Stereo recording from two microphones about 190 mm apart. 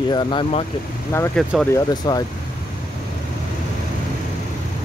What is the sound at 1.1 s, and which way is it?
Speech, 15° left (ahead or behind).